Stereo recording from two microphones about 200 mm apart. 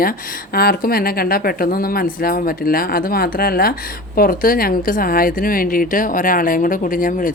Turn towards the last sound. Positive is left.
turn(degrees=45)  # may be behind; listen again after turning